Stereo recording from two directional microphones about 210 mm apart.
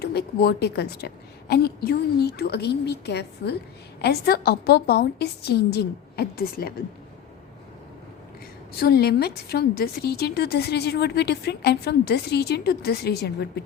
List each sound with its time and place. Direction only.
0.0 s a woman's voice: 50° left (ahead or behind)
8.8 s a woman's voice: 50° left (ahead or behind)